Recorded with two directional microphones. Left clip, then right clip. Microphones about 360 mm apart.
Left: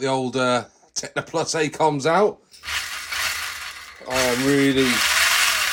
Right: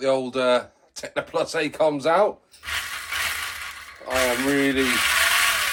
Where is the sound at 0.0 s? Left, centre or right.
Left.